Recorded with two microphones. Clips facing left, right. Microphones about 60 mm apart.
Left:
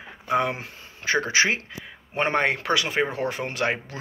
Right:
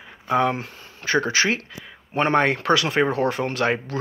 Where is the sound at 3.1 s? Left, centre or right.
Right.